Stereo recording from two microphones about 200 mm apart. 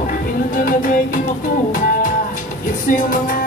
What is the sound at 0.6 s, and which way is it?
Music, 45° left (ahead or behind).